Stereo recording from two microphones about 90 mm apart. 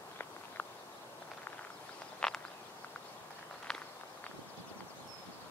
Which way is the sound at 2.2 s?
5° left (ahead or behind).